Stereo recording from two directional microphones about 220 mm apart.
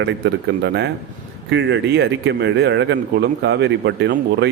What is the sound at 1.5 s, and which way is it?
Speech, 55° right (ahead or behind).